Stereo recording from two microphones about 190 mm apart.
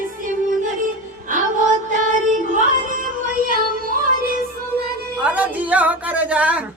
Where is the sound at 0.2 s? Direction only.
45° right (ahead or behind).